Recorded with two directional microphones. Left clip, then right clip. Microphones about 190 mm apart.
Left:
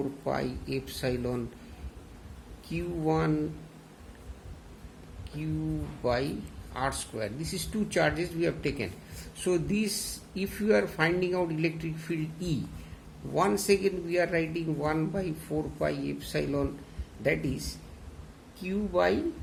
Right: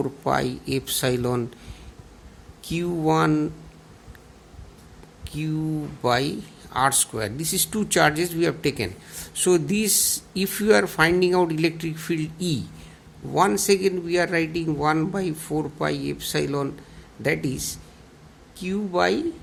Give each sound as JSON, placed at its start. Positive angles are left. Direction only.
{"t": 0.3, "sound": "speech", "side_deg": -50}
{"t": 2.6, "sound": "speech", "side_deg": -50}
{"t": 6.0, "sound": "speech", "side_deg": -50}